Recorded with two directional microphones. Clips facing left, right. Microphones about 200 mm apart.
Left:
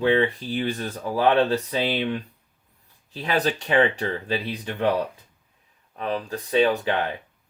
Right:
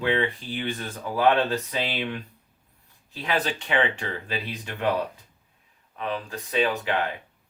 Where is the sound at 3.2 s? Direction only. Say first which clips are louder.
Left 3 dB; 40° left (ahead or behind).